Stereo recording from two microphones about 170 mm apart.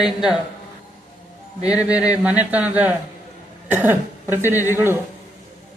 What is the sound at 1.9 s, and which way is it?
Speech, 5° right (ahead or behind).